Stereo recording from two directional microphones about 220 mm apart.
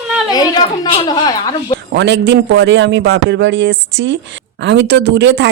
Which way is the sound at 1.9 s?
50° right (ahead or behind).